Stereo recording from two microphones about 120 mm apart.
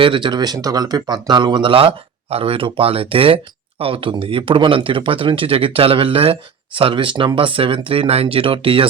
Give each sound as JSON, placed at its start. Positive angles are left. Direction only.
{"t": 0.0, "sound": "speech", "side_deg": -45}